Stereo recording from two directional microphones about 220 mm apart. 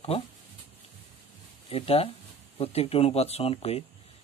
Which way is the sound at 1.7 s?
25° left (ahead or behind).